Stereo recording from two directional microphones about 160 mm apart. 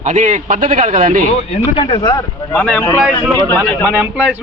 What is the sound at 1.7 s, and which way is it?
Speech, 35° left (ahead or behind).